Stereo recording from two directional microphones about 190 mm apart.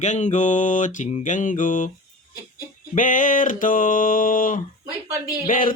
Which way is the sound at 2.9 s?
45° left (ahead or behind).